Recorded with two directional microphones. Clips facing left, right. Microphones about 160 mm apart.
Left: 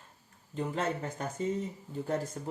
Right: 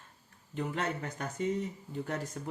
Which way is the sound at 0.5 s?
30° left (ahead or behind).